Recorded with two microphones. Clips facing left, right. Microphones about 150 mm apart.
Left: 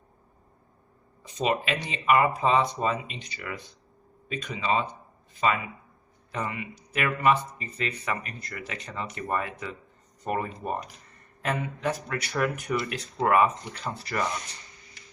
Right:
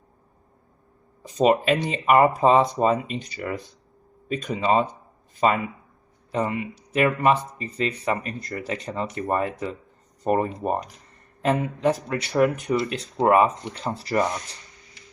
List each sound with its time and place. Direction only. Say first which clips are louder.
1.2 s speech: right 8 dB; 40° right (ahead or behind)
4.3 s speech: right 6 dB; 40° right (ahead or behind)
6.3 s speech: right 7 dB; 30° right (ahead or behind)
11.4 s speech: right 7 dB; 25° right (ahead or behind)